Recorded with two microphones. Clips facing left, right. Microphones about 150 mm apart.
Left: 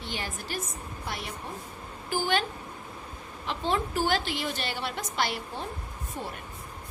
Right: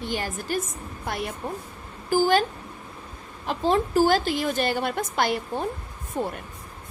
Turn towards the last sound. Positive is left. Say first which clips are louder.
# right 8 dB
turn(degrees=-55)  # may be behind; listen again after turning